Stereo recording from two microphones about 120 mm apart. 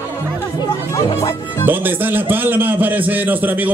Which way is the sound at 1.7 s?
15° right (ahead or behind).